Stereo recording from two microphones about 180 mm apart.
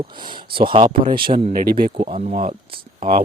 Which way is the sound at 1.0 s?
55° right (ahead or behind).